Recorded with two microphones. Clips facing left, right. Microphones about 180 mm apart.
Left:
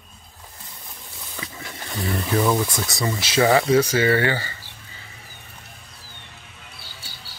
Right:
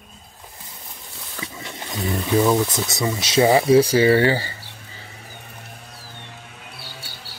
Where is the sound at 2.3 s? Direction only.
10° right (ahead or behind).